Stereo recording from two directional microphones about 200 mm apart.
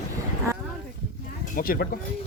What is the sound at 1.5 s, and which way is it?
Speech, 45° left (ahead or behind).